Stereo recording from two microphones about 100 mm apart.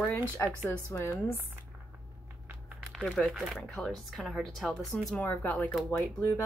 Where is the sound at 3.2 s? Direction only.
5° right (ahead or behind).